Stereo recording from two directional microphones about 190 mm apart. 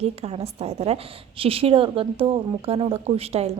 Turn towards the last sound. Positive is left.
turn(degrees=-35)  # may be behind; listen again after turning